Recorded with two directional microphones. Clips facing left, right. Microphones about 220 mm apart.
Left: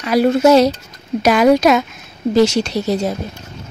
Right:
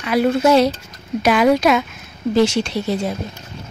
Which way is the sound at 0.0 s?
40° left (ahead or behind).